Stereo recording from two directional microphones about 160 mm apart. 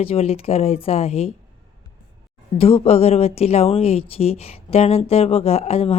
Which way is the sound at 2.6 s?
35° left (ahead or behind).